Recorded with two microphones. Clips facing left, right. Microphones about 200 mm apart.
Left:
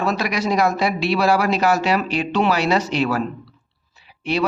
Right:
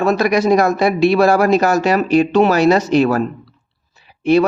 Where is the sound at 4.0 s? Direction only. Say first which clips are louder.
Right 10 dB; 45° right (ahead or behind).